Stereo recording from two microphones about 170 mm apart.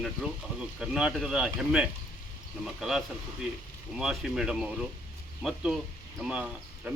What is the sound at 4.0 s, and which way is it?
A man's voice, 5° right (ahead or behind).